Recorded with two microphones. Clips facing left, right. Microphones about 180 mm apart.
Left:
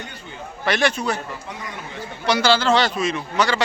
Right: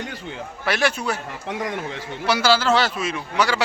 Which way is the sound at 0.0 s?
90° right.